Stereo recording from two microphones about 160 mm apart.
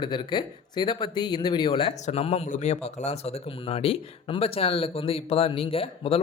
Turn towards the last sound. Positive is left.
turn(degrees=35)  # may be behind; listen again after turning